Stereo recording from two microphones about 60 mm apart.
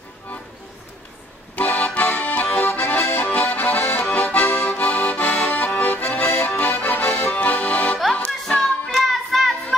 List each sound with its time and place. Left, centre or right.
1.5 s music: left
2.0 s accordion: left
8.2 s music: centre
8.9 s child singing: centre